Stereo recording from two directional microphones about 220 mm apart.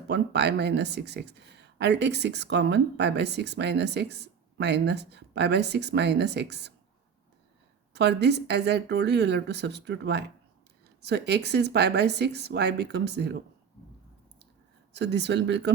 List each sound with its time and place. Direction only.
0.1 s speech: 50° right (ahead or behind)
7.9 s speech: 50° right (ahead or behind)
14.9 s speech: 50° right (ahead or behind)